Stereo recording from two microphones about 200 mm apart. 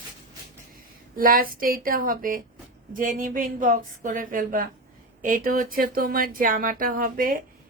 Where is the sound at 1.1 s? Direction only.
45° right (ahead or behind).